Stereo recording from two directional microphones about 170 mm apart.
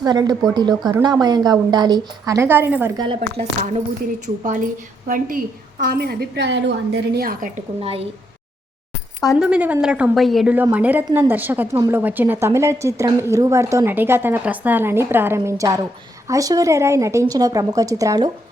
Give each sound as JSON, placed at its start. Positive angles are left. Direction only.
{"t": 0.0, "sound": "a woman's voice", "side_deg": -25}
{"t": 3.2, "sound": "speech", "side_deg": -40}
{"t": 4.4, "sound": "a woman's voice", "side_deg": -50}
{"t": 7.8, "sound": "speech", "side_deg": -35}
{"t": 9.4, "sound": "a woman's voice", "side_deg": -5}